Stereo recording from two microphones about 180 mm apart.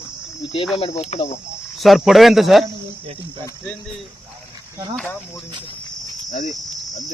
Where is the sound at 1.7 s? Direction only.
Centre (ahead or behind).